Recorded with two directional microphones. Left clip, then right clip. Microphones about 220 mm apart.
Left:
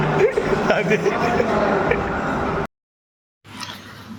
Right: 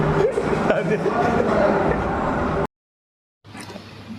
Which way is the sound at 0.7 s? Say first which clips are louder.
Left 3 dB; 5° left (ahead or behind).